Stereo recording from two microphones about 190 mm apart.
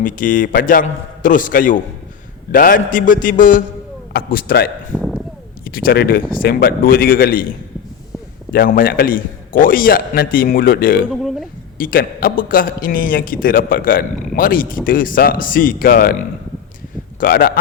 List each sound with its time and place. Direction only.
0.0 s a man's voice: 45° left (ahead or behind)
4.9 s a sound: centre (ahead or behind)
5.6 s a man's voice: 50° left (ahead or behind)
8.5 s a man's voice: 50° left (ahead or behind)
11.1 s speech: centre (ahead or behind)
11.8 s a man's voice: 50° left (ahead or behind)